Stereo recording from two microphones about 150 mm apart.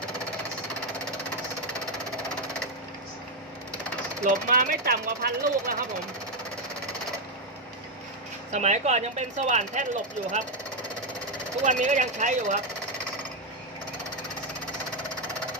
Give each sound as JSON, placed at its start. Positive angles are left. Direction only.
{"t": 4.2, "sound": "speech", "side_deg": -65}
{"t": 8.5, "sound": "speech", "side_deg": -50}
{"t": 11.6, "sound": "speech", "side_deg": -55}